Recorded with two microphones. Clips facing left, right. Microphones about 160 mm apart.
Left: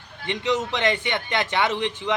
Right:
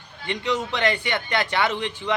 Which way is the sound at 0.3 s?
20° left (ahead or behind).